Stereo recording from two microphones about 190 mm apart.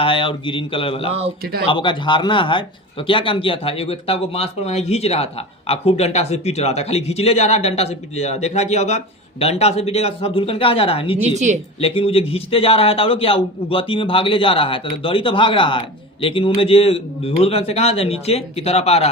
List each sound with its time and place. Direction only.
0.0 s speech: 30° left (ahead or behind)